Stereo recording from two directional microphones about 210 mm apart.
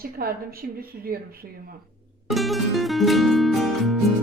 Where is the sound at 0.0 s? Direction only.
45° right (ahead or behind).